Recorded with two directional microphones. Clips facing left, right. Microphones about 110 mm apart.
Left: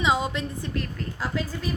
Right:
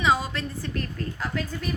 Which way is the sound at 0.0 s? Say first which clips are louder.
Even; 20° left (ahead or behind).